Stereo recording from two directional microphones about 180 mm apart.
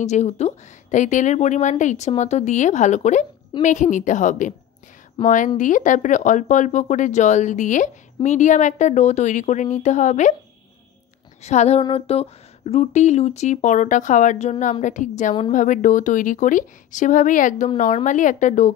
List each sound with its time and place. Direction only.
0.0 s a woman's voice: 40° left (ahead or behind)
11.4 s speech: 40° left (ahead or behind)